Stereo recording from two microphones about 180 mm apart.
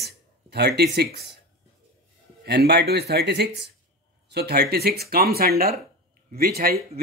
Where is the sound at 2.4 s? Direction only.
65° right (ahead or behind).